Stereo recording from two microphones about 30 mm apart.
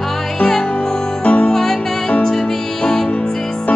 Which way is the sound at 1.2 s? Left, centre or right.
Left.